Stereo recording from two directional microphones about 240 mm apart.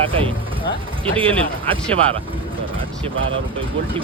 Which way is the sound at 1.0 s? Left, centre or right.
Right.